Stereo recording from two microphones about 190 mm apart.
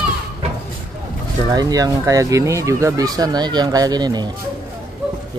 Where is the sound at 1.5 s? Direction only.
20° right (ahead or behind).